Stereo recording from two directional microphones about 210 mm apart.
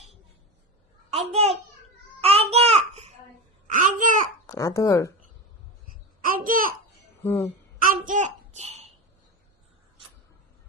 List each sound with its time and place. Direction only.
1.3 s a child's voice: 30° right (ahead or behind)
2.2 s babbling: 30° right (ahead or behind)
4.4 s speech: 15° left (ahead or behind)
6.2 s babbling: 40° right (ahead or behind)
7.2 s a sound: 10° left (ahead or behind)
7.8 s a sound: 40° right (ahead or behind)